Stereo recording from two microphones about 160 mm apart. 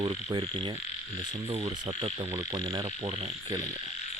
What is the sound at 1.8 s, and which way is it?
Speech, 40° right (ahead or behind).